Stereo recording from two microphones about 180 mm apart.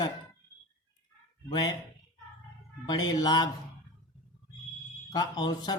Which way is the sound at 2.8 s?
20° left (ahead or behind).